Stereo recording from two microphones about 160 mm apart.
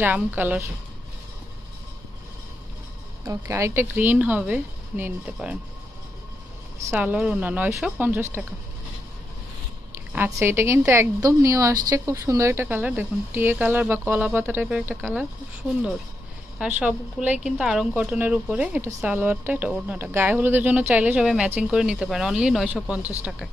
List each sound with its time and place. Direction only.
0.0 s speech: 10° right (ahead or behind)
3.3 s speech: 20° right (ahead or behind)
6.9 s speech: 10° right (ahead or behind)
10.1 s speech: 15° right (ahead or behind)
16.5 s speech: 5° right (ahead or behind)